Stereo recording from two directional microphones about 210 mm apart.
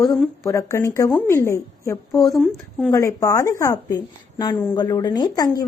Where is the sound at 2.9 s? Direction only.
15° left (ahead or behind).